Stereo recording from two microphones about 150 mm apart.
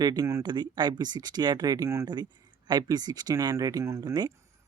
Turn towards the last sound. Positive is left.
turn(degrees=-30)  # may be behind; listen again after turning